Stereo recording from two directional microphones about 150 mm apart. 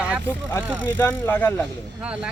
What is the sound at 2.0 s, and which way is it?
Speech, 10° right (ahead or behind).